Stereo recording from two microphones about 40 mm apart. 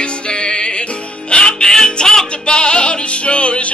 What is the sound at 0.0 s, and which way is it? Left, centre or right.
Music, left.